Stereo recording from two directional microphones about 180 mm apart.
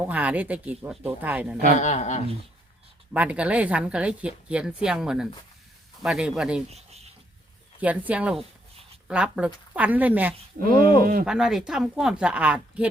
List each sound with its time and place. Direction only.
0.1 s speech: 10° right (ahead or behind)
1.8 s speech: 40° left (ahead or behind)
3.1 s speech: 10° right (ahead or behind)
6.7 s a sound: 35° right (ahead or behind)
7.8 s speech: 10° right (ahead or behind)
10.6 s speech: 55° right (ahead or behind)
11.3 s speech: 5° right (ahead or behind)